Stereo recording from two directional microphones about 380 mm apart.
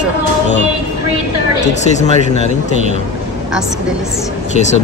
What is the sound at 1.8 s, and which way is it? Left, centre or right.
Speech, centre.